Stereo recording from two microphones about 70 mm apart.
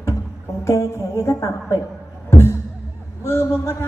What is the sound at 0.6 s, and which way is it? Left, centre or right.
A woman's voice, left.